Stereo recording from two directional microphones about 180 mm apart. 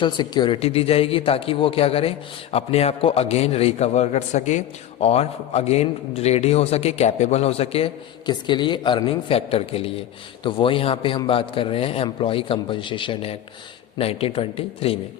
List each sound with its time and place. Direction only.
0.0 s a man's voice: 25° left (ahead or behind)